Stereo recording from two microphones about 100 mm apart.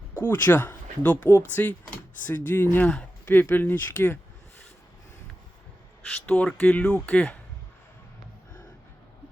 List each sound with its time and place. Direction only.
0.1 s speech: 20° left (ahead or behind)
6.2 s speech: 10° left (ahead or behind)